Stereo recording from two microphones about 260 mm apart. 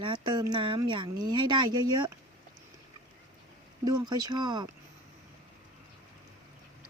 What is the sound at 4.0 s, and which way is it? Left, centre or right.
Speech, centre.